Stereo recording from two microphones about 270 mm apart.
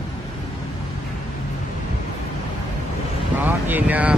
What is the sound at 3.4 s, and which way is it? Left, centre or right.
Vehicle, centre.